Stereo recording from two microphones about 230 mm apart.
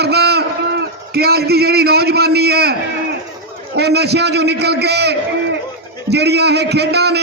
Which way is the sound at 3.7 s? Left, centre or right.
Right.